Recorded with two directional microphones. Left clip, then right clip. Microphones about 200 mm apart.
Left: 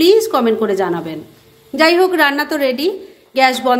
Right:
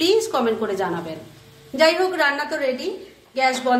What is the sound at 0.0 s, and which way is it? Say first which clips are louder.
A woman's voice: left 7 dB; 35° left (ahead or behind).